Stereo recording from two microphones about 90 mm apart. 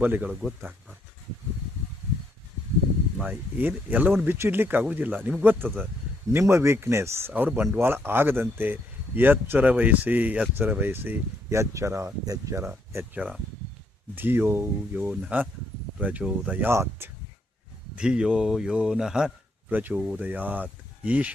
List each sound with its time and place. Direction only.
0.0 s speech: 20° right (ahead or behind)
3.2 s speech: 15° right (ahead or behind)
11.4 s speech: 35° right (ahead or behind)
12.6 s speech: 25° right (ahead or behind)
13.1 s speech: 10° right (ahead or behind)
14.2 s speech: 25° right (ahead or behind)
17.9 s speech: 10° right (ahead or behind)
19.7 s speech: 20° right (ahead or behind)